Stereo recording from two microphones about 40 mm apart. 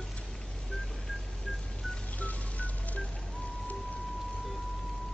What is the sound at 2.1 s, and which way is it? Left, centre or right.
Music, left.